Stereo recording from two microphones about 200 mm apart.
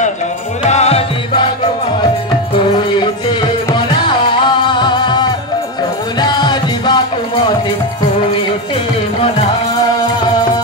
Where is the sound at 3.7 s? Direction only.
25° left (ahead or behind).